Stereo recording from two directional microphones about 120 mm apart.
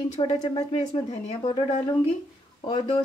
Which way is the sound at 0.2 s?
45° left (ahead or behind).